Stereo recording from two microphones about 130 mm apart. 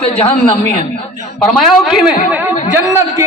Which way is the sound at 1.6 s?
5° right (ahead or behind).